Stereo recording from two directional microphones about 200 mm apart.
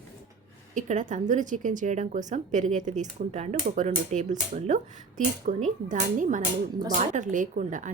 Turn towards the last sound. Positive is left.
turn(degrees=-40)  # may be behind; listen again after turning